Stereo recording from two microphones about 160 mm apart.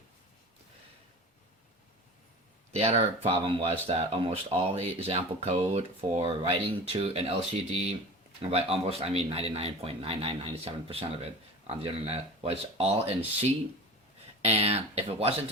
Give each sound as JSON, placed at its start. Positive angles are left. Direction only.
{"t": 2.7, "sound": "speech", "side_deg": -40}